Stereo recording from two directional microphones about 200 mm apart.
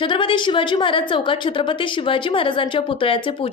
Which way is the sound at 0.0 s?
25° left (ahead or behind).